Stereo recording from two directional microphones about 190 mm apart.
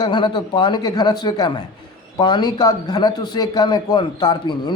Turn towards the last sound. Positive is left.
turn(degrees=25)  # may be behind; listen again after turning